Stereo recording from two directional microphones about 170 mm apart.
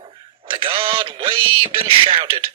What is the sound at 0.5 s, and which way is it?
Speech, 30° right (ahead or behind).